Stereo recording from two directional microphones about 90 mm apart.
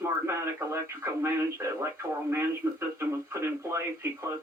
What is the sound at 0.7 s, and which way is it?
Speech, 35° right (ahead or behind).